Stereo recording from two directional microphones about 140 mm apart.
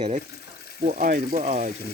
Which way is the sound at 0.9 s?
80° right.